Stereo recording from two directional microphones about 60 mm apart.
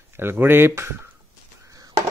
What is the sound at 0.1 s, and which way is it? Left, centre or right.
Speech, right.